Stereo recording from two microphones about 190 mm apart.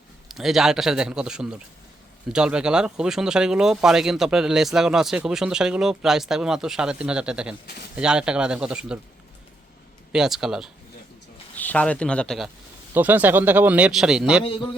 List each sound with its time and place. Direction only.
0.3 s speech: centre (ahead or behind)
10.1 s speech: 5° right (ahead or behind)
11.5 s speech: 10° left (ahead or behind)
12.9 s speech: 10° right (ahead or behind)
14.4 s a man's voice: 30° left (ahead or behind)